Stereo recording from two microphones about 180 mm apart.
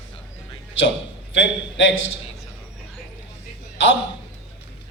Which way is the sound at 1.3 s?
90° left.